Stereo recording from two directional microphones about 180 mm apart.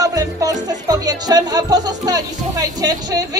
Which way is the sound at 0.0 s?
20° right (ahead or behind).